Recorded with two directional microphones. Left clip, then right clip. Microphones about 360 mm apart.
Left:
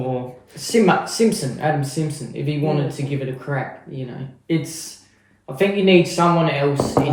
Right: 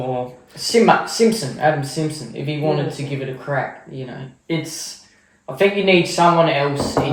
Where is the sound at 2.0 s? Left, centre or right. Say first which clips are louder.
Right 2 dB; centre.